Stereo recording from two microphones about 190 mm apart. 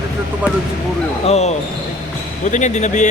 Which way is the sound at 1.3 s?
35° left (ahead or behind).